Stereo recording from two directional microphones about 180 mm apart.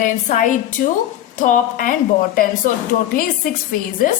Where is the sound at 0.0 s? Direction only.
45° left (ahead or behind).